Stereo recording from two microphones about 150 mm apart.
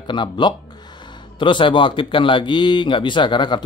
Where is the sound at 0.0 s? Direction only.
30° left (ahead or behind).